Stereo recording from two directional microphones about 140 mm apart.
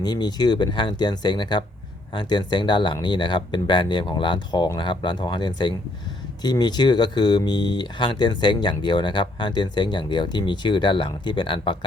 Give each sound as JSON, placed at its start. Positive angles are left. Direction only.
{"t": 0.0, "sound": "speech", "side_deg": 30}